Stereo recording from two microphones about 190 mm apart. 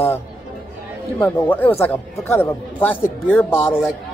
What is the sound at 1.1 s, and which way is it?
A man's voice, 10° left (ahead or behind).